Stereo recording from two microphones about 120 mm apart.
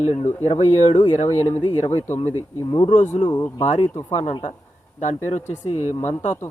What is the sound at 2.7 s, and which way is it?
Speech, 40° left (ahead or behind).